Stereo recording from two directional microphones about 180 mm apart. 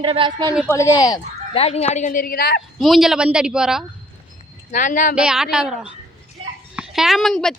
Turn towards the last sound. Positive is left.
turn(degrees=0)  # may be behind; listen again after turning